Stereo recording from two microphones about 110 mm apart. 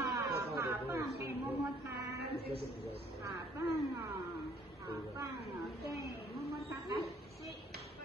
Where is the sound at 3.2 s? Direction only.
25° right (ahead or behind).